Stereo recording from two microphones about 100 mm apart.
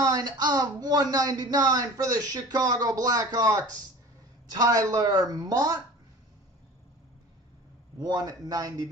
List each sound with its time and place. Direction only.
0.0 s speech: 40° right (ahead or behind)
8.0 s speech: 35° right (ahead or behind)